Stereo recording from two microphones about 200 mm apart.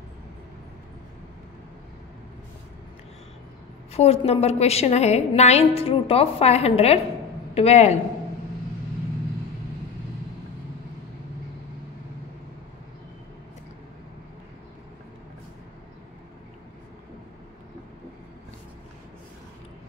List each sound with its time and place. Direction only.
3.9 s a woman's voice: 30° left (ahead or behind)